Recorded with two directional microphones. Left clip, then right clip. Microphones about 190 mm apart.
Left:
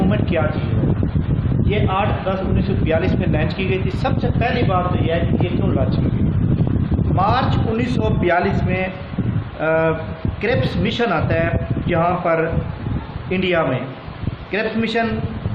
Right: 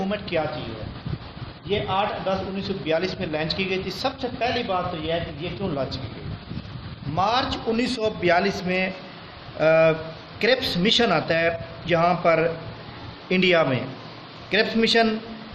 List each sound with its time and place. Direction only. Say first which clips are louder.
0.1 s a sound: left 5 dB; 30° right (ahead or behind)
1.7 s speech: left 3 dB; 25° right (ahead or behind)
7.2 s a man's voice: left 3 dB; 35° right (ahead or behind); by 15.0 s 55° right (ahead or behind)